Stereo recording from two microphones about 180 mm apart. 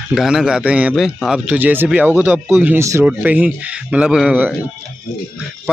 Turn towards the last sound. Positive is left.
turn(degrees=-10)  # may be behind; listen again after turning